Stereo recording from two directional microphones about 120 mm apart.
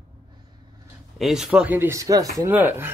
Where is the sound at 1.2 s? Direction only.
5° right (ahead or behind).